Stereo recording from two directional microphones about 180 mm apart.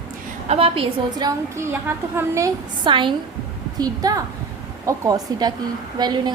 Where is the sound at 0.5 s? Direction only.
30° right (ahead or behind); by 2.5 s 15° right (ahead or behind).